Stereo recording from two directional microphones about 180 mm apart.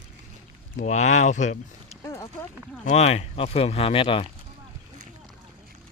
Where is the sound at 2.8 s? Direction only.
40° left (ahead or behind).